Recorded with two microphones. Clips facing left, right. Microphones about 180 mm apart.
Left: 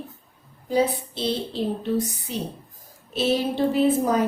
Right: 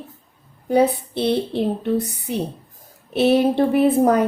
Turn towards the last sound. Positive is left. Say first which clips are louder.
# right 5 dB
turn(degrees=-60)  # may be behind; listen again after turning